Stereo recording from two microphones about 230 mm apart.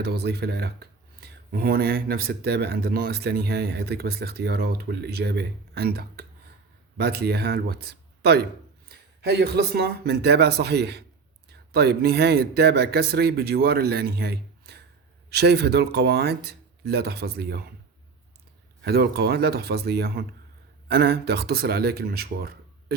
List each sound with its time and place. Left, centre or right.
0.0 s speech: right
18.8 s speech: right